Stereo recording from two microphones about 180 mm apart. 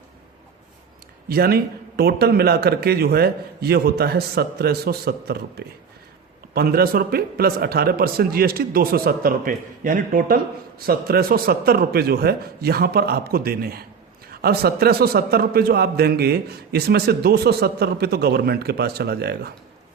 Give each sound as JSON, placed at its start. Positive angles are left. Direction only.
{"t": 1.3, "sound": "a man's voice", "side_deg": -60}